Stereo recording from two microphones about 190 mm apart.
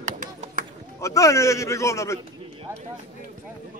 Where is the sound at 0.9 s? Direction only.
15° left (ahead or behind).